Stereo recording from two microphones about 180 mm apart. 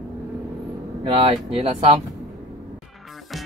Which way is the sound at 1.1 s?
35° right (ahead or behind).